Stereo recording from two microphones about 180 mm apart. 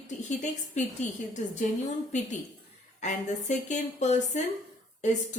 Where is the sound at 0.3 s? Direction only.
40° left (ahead or behind).